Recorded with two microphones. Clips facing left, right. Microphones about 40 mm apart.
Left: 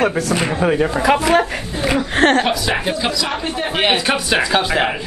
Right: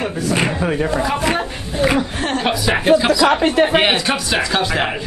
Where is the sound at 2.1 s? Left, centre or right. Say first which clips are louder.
Left 8 dB; left.